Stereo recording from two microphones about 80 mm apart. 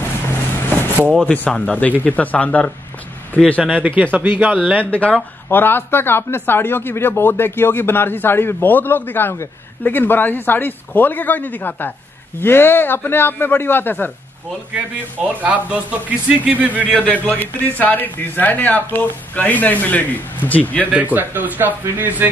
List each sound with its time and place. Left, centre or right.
0.7 s vehicle: right
1.2 s speech: centre
4.0 s speech: right
4.9 s speech: centre
15.4 s speech: centre
17.0 s speech: centre
20.8 s speech: centre